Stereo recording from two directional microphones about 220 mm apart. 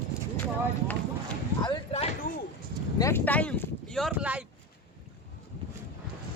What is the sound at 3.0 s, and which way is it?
Speech, 10° left (ahead or behind).